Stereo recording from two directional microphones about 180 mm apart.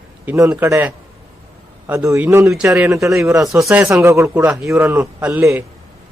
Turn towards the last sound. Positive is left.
turn(degrees=-10)  # may be behind; listen again after turning